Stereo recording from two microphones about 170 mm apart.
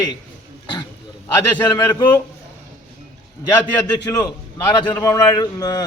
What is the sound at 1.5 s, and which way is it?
Speech, 20° left (ahead or behind).